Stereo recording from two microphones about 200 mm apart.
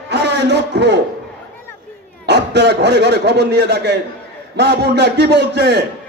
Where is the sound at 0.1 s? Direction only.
55° right (ahead or behind).